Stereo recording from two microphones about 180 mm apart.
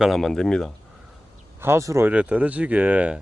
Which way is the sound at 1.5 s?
15° right (ahead or behind).